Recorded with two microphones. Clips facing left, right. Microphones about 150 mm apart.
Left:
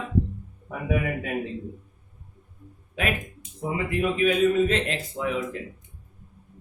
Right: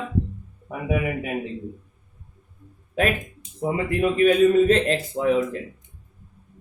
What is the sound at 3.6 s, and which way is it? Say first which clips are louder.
A man's voice: right 4 dB; 40° right (ahead or behind).